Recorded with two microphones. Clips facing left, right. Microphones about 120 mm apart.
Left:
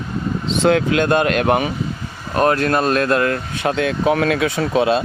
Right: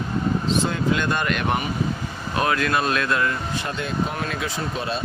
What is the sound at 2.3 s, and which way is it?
Speech, 40° left (ahead or behind).